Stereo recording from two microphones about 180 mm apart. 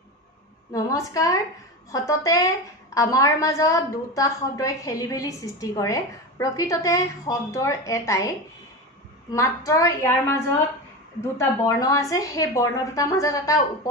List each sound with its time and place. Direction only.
0.7 s a woman's voice: 20° left (ahead or behind)
9.3 s a woman's voice: 15° left (ahead or behind)